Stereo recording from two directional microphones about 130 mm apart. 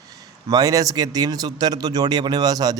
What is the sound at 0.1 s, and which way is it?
A man's voice, 30° right (ahead or behind).